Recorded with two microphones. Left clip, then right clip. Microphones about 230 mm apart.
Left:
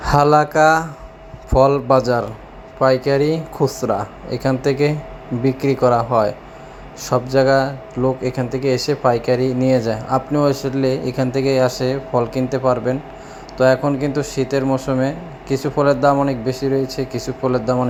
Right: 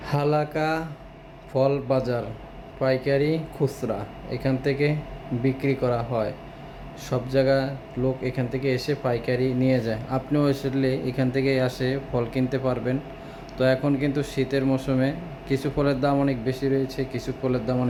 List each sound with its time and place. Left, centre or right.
0.0 s speech: left